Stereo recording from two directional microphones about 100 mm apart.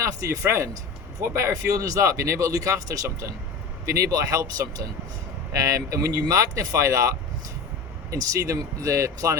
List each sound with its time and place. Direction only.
0.0 s speech: 30° right (ahead or behind)
8.1 s speech: 35° right (ahead or behind)